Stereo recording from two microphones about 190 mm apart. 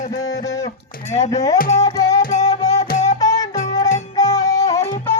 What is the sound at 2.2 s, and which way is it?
Music, 40° left (ahead or behind).